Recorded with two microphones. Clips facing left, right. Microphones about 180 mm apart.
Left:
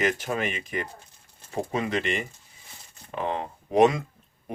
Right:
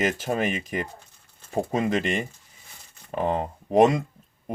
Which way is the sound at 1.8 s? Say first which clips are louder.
Right 2 dB; 40° right (ahead or behind).